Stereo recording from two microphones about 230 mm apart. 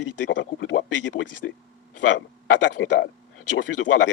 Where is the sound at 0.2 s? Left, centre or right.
Left.